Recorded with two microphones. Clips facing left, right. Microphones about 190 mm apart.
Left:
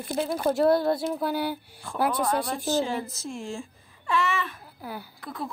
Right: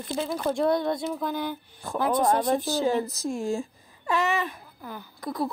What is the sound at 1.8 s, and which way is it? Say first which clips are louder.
A child's voice: right 3 dB; 40° right (ahead or behind).